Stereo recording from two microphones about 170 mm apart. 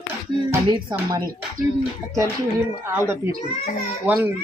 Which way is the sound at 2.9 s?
15° right (ahead or behind).